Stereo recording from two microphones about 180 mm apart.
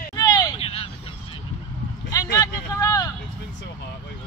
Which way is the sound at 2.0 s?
20° left (ahead or behind).